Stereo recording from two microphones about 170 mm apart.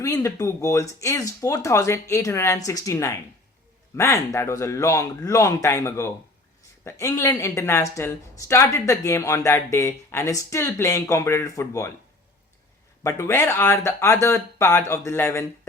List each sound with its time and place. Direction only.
0.0 s speech: 20° left (ahead or behind)
13.0 s speech: 15° left (ahead or behind)